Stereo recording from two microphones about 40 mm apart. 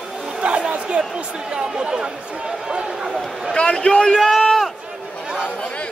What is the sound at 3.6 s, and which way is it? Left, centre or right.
Speech, left.